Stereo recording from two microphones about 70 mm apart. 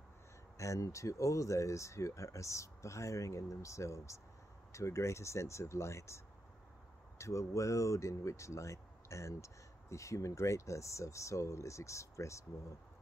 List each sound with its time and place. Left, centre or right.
0.6 s speech: left